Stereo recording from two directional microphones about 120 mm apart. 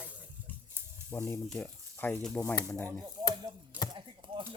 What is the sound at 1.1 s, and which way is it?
Speech, 20° left (ahead or behind).